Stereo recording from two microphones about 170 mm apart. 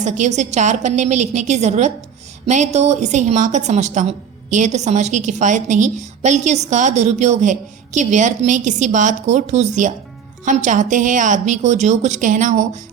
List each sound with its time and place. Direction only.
0.0 s a woman's voice: 45° right (ahead or behind)